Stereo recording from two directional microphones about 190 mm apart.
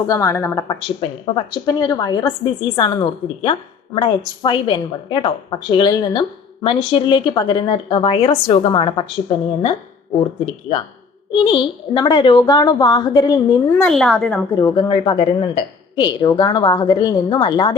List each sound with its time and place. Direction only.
0.1 s a woman's voice: 15° left (ahead or behind)
10.4 s a woman's voice: 30° left (ahead or behind); by 13.9 s 15° left (ahead or behind)
13.9 s a woman's voice: centre (ahead or behind)
14.6 s a woman's voice: 25° left (ahead or behind)